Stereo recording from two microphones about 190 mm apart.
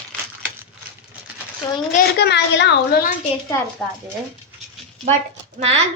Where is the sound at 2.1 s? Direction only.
65° left (ahead or behind).